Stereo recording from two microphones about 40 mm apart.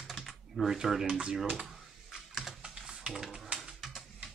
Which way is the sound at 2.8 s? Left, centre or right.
Centre.